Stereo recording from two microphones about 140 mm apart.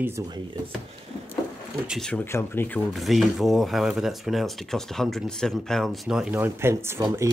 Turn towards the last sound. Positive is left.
turn(degrees=-20)  # may be behind; listen again after turning